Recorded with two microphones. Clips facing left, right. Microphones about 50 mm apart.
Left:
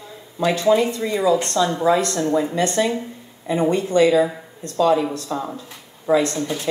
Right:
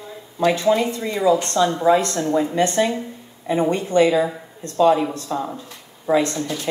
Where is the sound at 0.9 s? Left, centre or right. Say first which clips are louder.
Even; right.